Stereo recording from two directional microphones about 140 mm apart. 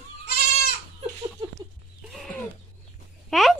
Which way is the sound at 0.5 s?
90° left.